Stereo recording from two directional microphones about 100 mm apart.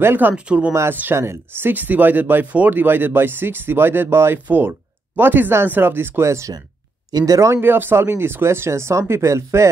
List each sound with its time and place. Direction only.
0.0 s speech: 20° right (ahead or behind)